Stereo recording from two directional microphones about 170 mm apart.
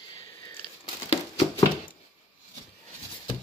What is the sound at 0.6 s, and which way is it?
Crumpling, 30° left (ahead or behind).